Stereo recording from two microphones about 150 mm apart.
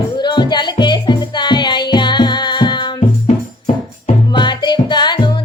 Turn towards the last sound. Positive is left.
turn(degrees=30)  # may be behind; listen again after turning